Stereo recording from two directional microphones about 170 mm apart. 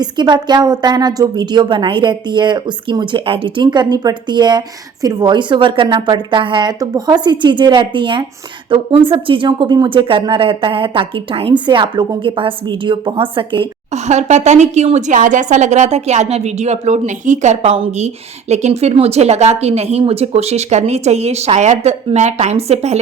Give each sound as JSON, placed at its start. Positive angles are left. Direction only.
{"t": 0.0, "sound": "a woman's voice", "side_deg": -25}
{"t": 14.1, "sound": "a woman's voice", "side_deg": -45}